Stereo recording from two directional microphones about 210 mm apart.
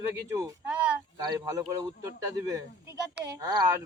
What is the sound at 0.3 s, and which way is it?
Speech, 15° right (ahead or behind).